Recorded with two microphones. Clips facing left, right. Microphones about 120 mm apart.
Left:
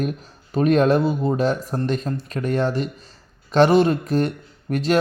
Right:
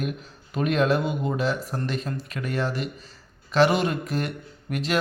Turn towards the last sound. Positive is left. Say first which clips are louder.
# left 7 dB
turn(degrees=40)  # may be behind; listen again after turning